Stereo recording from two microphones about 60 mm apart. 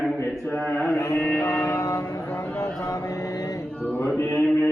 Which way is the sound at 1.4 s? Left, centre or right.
Left.